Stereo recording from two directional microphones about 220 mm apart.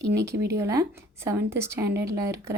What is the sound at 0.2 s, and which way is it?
Speech, 15° right (ahead or behind).